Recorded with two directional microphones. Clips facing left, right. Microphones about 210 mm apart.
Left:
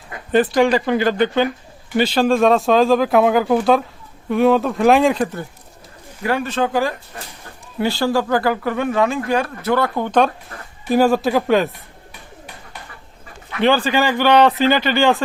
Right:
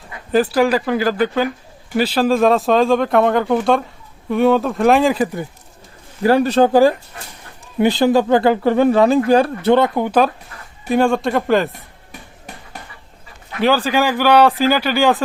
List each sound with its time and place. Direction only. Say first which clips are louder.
0.3 s speech: even; centre (ahead or behind)
6.2 s speech: right 7 dB; 35° right (ahead or behind)
7.8 s speech: right 5 dB; 20° right (ahead or behind); by 11.7 s centre (ahead or behind)
13.6 s speech: even; 5° right (ahead or behind)